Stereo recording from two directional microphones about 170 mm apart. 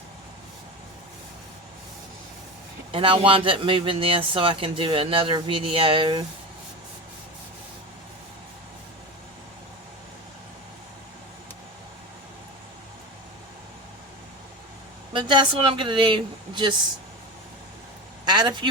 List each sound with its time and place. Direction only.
2.9 s a man's voice: 30° right (ahead or behind)
15.1 s speech: 30° right (ahead or behind)
18.3 s speech: 25° right (ahead or behind)